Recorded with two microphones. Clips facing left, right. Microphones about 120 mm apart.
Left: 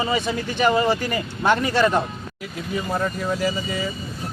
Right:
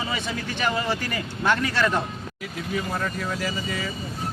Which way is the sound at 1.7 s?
20° left (ahead or behind).